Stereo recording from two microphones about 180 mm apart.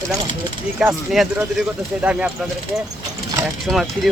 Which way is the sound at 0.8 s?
Centre (ahead or behind).